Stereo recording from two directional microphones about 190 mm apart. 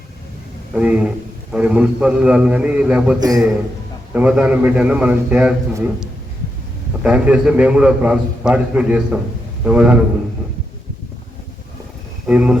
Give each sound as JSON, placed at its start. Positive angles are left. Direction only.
{"t": 0.7, "sound": "a man's voice", "side_deg": -5}
{"t": 3.2, "sound": "a man's voice", "side_deg": -20}
{"t": 4.1, "sound": "a man's voice", "side_deg": -5}
{"t": 12.3, "sound": "speech", "side_deg": -5}